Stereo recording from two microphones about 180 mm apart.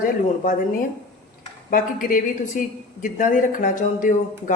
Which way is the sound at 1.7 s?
50° left (ahead or behind).